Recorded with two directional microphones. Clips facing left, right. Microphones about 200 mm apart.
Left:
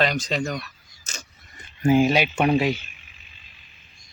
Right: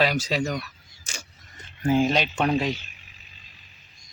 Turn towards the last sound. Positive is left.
turn(degrees=-40)  # may be behind; listen again after turning